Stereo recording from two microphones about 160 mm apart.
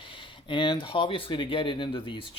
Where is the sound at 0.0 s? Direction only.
30° left (ahead or behind).